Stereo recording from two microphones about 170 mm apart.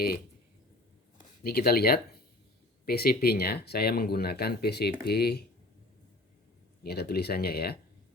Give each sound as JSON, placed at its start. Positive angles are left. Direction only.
{"t": 1.5, "sound": "speech", "side_deg": 65}
{"t": 6.8, "sound": "speech", "side_deg": 70}